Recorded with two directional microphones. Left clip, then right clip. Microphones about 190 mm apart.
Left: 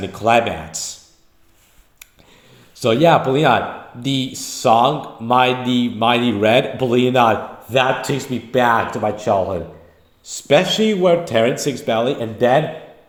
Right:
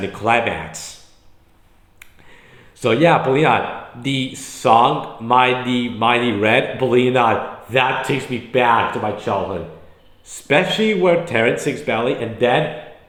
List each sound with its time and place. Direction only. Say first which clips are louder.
0.2 s speech: left 2 dB; 50° left (ahead or behind)
2.8 s speech: left 1 dB; 45° left (ahead or behind)
9.0 s speech: left 3 dB; 40° left (ahead or behind)
10.3 s speech: left 2 dB; 50° left (ahead or behind)